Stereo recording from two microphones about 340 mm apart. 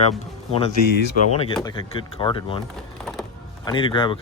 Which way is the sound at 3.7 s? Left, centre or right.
Centre.